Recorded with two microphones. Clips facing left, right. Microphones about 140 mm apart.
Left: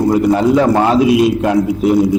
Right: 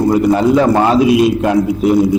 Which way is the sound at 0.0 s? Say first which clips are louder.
Even; 15° right (ahead or behind).